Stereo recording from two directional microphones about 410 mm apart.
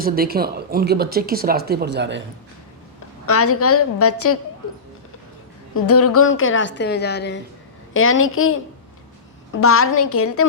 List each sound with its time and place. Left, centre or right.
0.0 s speech: right
3.2 s a woman's voice: left
5.7 s a woman's voice: left